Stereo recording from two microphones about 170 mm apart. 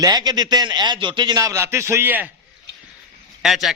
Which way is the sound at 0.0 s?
25° right (ahead or behind).